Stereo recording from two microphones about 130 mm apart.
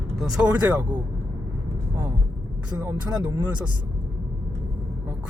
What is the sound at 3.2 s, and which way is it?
Speech, 30° right (ahead or behind).